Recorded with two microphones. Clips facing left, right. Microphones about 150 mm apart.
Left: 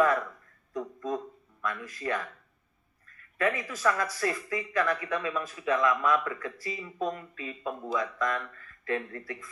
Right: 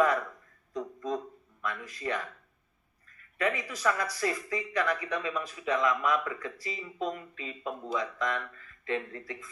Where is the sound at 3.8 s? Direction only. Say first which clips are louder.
Left 1 dB; 20° right (ahead or behind).